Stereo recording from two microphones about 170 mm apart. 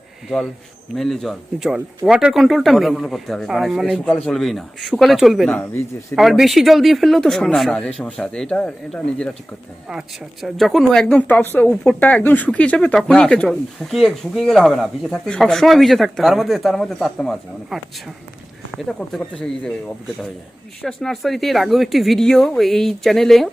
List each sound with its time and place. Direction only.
0.9 s speech: centre (ahead or behind)
5.5 s speech: 15° left (ahead or behind)
6.1 s speech: centre (ahead or behind)
10.4 s speech: centre (ahead or behind)
18.9 s speech: 5° left (ahead or behind)
20.8 s speech: centre (ahead or behind)